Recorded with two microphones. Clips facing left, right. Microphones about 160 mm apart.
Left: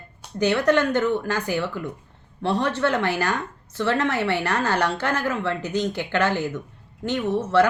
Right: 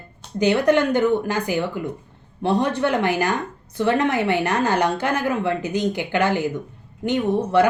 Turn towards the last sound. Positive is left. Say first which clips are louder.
# right 2 dB
turn(degrees=-15)  # may be behind; listen again after turning